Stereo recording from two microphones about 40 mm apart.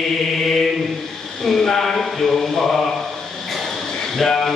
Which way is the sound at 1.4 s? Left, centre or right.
Centre.